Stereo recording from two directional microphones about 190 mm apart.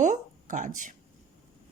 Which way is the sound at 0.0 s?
40° right (ahead or behind).